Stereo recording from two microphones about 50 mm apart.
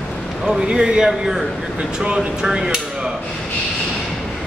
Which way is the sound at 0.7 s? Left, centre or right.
Centre.